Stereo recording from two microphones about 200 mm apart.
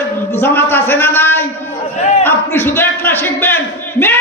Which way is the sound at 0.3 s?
10° left (ahead or behind).